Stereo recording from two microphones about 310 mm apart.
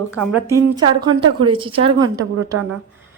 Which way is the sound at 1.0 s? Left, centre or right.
Centre.